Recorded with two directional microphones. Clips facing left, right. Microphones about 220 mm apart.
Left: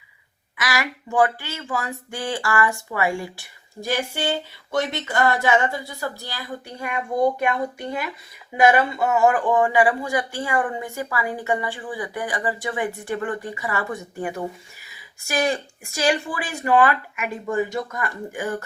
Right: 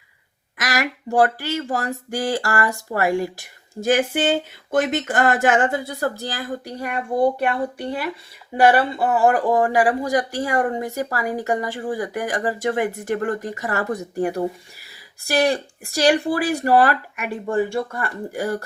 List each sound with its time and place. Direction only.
0.5 s speech: 40° right (ahead or behind)
4.7 s speech: 50° right (ahead or behind)